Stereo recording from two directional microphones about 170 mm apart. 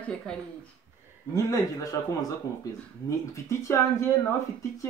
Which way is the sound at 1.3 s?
20° left (ahead or behind).